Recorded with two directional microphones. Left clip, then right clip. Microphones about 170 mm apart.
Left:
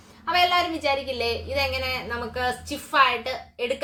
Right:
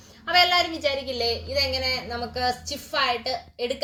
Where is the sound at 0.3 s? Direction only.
5° left (ahead or behind).